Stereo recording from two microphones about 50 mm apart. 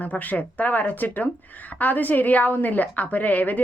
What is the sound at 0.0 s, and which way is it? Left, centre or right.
A woman's voice, left.